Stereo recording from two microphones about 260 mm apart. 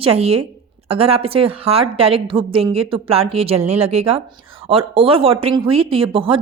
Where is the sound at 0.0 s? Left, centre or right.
Right.